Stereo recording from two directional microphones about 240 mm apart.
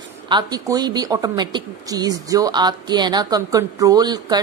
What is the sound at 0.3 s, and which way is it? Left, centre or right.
Speech, centre.